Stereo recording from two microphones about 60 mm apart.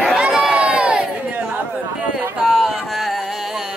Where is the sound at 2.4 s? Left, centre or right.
Centre.